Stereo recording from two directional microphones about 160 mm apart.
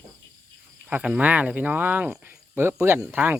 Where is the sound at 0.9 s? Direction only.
10° right (ahead or behind).